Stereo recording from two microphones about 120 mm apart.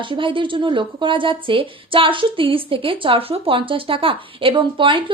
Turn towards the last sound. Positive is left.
turn(degrees=-45)  # may be behind; listen again after turning